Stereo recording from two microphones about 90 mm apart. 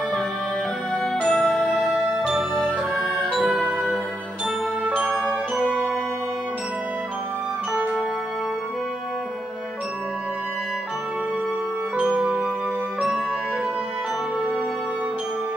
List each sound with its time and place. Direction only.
0.9 s music: 10° left (ahead or behind)
1.8 s music: centre (ahead or behind)
4.8 s music: 15° right (ahead or behind)
5.1 s music: 20° left (ahead or behind)
12.0 s music: centre (ahead or behind)